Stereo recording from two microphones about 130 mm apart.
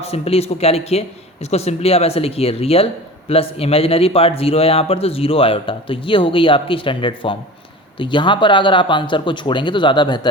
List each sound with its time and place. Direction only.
0.0 s speech: 50° left (ahead or behind)